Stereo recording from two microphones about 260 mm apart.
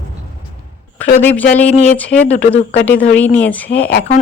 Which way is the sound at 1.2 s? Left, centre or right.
Centre.